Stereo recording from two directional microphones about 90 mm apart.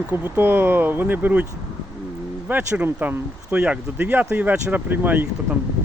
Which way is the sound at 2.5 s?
15° right (ahead or behind).